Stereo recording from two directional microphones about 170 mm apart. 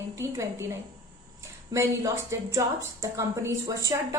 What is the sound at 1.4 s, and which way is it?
A woman's voice, 15° right (ahead or behind).